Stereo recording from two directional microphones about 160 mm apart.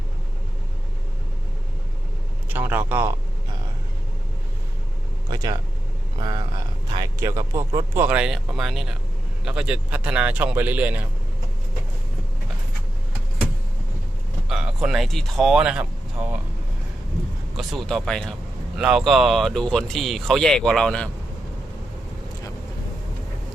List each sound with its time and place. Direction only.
2.5 s speech: 10° right (ahead or behind)
5.3 s speech: 25° right (ahead or behind)
14.4 s speech: 5° right (ahead or behind)
17.6 s speech: centre (ahead or behind)